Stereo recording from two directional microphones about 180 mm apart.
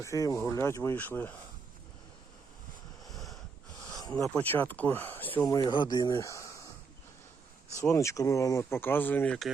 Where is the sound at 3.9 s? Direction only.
20° left (ahead or behind).